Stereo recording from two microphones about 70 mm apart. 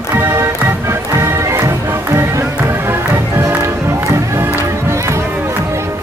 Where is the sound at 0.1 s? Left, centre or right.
Right.